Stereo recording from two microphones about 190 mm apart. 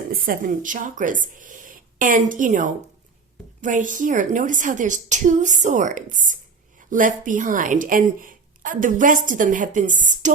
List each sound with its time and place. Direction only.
0.1 s a woman's voice: 50° right (ahead or behind)